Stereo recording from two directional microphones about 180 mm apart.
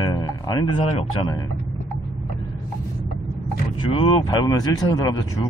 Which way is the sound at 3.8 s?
30° left (ahead or behind).